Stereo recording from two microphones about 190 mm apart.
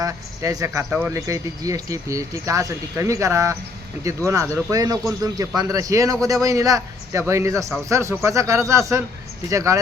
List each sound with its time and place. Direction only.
0.0 s a man's voice: 20° right (ahead or behind)